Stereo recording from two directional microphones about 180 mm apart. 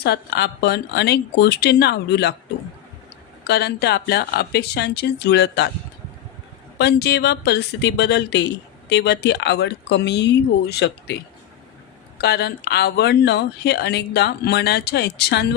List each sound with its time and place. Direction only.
0.0 s speech: 65° left (ahead or behind)
3.4 s speech: 65° left (ahead or behind)
6.7 s speech: 65° left (ahead or behind)